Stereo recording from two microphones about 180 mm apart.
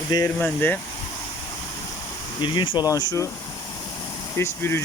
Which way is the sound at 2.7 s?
20° left (ahead or behind).